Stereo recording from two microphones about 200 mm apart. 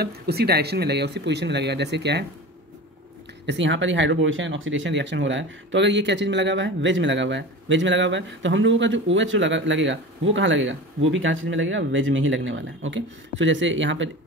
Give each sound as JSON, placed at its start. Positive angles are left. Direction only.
{"t": 0.0, "sound": "speech", "side_deg": -50}
{"t": 3.4, "sound": "speech", "side_deg": -65}